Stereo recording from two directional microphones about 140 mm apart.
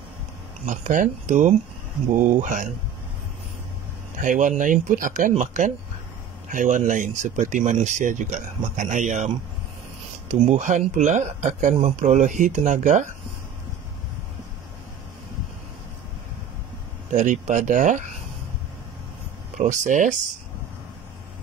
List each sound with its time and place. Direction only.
0.7 s speech: 70° right (ahead or behind)
4.2 s speech: 70° right (ahead or behind)
17.1 s speech: 65° right (ahead or behind)
19.6 s speech: 65° right (ahead or behind)